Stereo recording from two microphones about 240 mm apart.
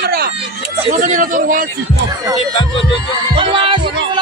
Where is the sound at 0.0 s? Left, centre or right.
Right.